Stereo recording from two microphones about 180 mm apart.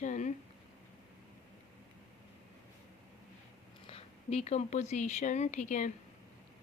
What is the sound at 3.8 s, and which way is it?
Speech, 35° left (ahead or behind).